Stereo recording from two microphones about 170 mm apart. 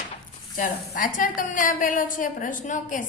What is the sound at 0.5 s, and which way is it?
A woman's voice, 50° left (ahead or behind).